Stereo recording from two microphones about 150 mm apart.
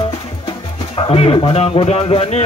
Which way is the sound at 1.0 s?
40° left (ahead or behind).